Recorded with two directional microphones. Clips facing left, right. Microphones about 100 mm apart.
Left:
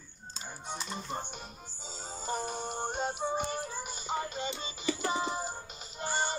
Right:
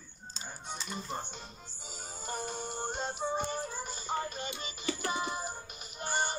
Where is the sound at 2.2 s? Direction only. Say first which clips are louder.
Left 3 dB; 20° left (ahead or behind).